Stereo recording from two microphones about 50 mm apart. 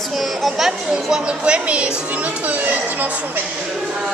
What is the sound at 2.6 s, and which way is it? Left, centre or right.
Speech, right.